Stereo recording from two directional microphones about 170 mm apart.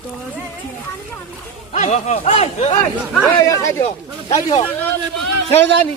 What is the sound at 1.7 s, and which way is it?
Speech, 40° left (ahead or behind).